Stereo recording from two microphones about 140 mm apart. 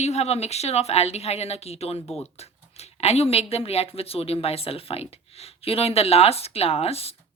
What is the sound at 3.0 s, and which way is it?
Speech, 50° left (ahead or behind).